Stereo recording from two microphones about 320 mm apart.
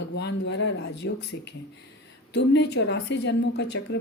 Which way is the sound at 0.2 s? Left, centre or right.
Left.